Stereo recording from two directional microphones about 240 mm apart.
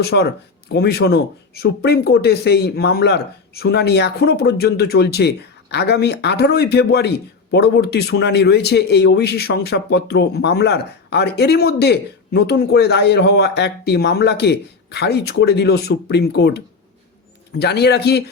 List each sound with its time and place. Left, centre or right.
0.0 s a man's voice: left